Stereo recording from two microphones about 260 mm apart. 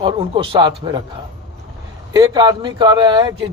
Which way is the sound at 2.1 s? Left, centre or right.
Centre.